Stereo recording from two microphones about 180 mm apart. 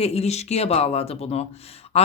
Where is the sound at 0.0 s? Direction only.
35° left (ahead or behind).